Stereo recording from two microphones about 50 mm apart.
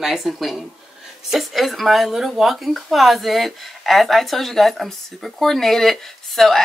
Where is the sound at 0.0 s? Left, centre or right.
Centre.